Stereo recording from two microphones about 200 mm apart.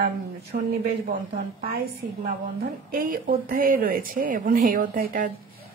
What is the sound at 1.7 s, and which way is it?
Speech, 45° right (ahead or behind).